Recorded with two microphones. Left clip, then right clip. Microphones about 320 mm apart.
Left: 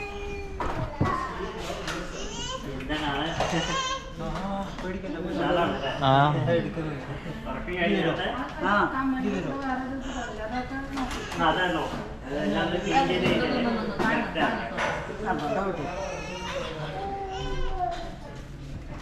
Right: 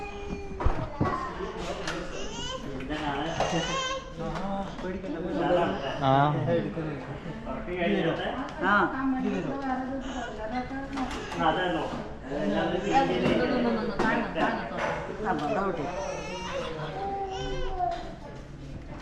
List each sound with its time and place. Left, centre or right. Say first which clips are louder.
0.6 s a sound: left 1 dB; centre
2.5 s children playing: left 2 dB; centre
7.7 s a man's voice: left 2 dB; centre